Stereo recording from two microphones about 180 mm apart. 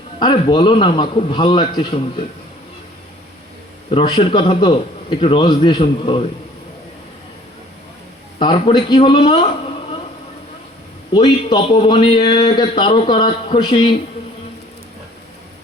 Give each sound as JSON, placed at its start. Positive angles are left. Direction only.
{"t": 0.2, "sound": "a man's voice", "side_deg": 25}
{"t": 3.9, "sound": "a man's voice", "side_deg": 25}
{"t": 8.4, "sound": "a man's voice", "side_deg": 30}
{"t": 11.1, "sound": "a man's voice", "side_deg": 25}